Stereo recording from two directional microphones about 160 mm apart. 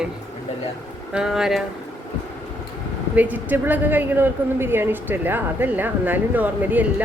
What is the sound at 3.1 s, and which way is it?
Speech, 10° right (ahead or behind).